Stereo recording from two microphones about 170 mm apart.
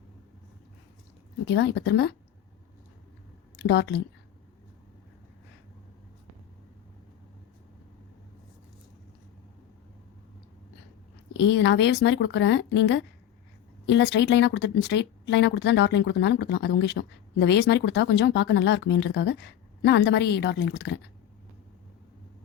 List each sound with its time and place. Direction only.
1.5 s speech: 90° left
3.6 s speech: 80° left
11.3 s speech: 90° left